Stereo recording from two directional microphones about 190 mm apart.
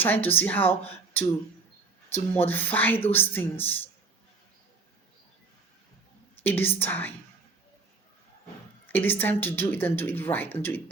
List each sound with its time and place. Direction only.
0.0 s speech: 10° left (ahead or behind)
6.4 s speech: 10° left (ahead or behind)
8.9 s speech: 10° left (ahead or behind)